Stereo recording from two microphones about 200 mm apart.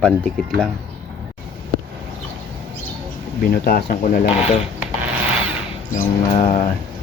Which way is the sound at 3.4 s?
45° left (ahead or behind).